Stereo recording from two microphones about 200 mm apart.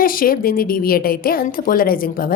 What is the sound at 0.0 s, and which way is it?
A woman's voice, 45° left (ahead or behind).